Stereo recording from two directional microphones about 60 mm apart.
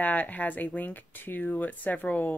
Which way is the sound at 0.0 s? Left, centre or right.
Left.